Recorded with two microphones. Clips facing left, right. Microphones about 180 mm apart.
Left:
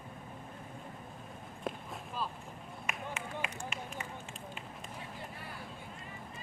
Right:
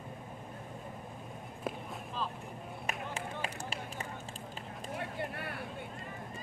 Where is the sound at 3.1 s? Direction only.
35° right (ahead or behind).